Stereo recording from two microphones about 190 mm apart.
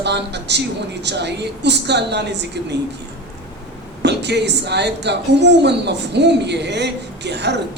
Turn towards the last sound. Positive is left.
turn(degrees=-65)  # may be behind; listen again after turning